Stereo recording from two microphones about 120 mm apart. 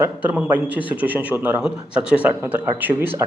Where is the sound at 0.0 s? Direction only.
15° right (ahead or behind).